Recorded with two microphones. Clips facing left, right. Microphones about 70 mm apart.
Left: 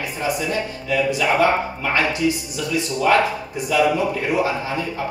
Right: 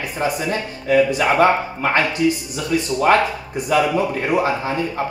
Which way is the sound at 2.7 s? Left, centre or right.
Right.